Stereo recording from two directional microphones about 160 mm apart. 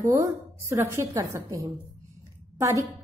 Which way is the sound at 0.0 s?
20° right (ahead or behind).